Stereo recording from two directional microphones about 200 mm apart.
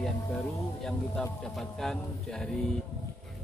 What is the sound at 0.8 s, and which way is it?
Speech, 5° left (ahead or behind).